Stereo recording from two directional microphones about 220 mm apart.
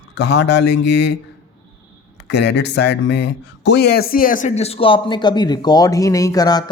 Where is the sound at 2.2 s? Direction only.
50° left (ahead or behind).